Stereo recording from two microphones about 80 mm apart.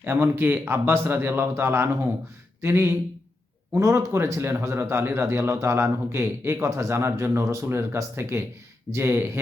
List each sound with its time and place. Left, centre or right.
0.0 s a man's voice: right